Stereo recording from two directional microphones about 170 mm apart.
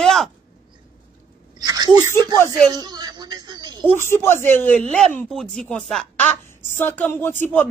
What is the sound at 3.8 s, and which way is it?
Speech, 15° left (ahead or behind).